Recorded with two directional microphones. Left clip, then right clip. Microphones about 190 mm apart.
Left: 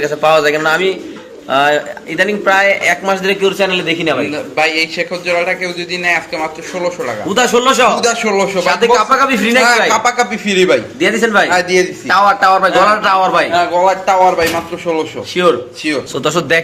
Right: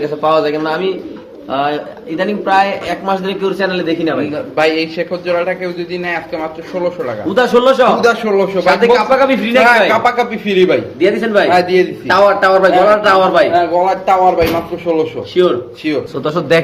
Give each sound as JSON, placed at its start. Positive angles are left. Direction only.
{"t": 0.0, "sound": "a man's voice", "side_deg": 10}
{"t": 4.3, "sound": "a man's voice", "side_deg": -25}
{"t": 7.3, "sound": "a man's voice", "side_deg": 25}
{"t": 8.0, "sound": "a man's voice", "side_deg": -15}
{"t": 8.7, "sound": "a man's voice", "side_deg": 30}
{"t": 10.0, "sound": "a man's voice", "side_deg": 0}
{"t": 11.0, "sound": "a man's voice", "side_deg": 40}
{"t": 11.5, "sound": "a man's voice", "side_deg": 0}
{"t": 12.0, "sound": "a man's voice", "side_deg": 35}
{"t": 13.5, "sound": "a man's voice", "side_deg": -10}
{"t": 15.4, "sound": "a man's voice", "side_deg": 30}
{"t": 15.8, "sound": "a man's voice", "side_deg": 0}